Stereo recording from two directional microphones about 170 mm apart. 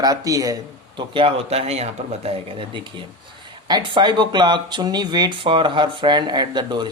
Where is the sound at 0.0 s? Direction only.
20° right (ahead or behind).